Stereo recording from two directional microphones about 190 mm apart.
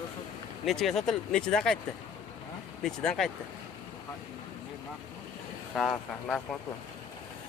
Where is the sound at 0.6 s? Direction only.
Centre (ahead or behind).